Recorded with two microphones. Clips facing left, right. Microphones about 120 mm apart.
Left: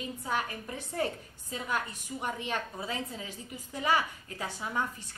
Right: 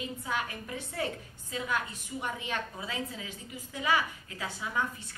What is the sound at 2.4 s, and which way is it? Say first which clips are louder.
A woman's voice: left 1 dB; 35° left (ahead or behind).